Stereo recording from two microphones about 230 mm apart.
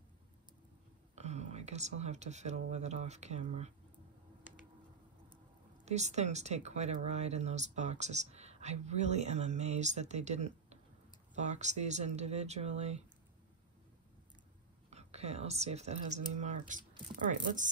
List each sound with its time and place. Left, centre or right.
1.1 s speech: right
5.9 s speech: right
14.9 s speech: right